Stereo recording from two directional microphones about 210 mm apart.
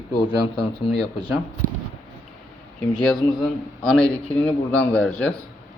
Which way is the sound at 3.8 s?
5° left (ahead or behind).